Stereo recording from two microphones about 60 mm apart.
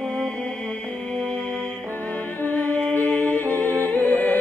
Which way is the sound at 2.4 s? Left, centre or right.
Left.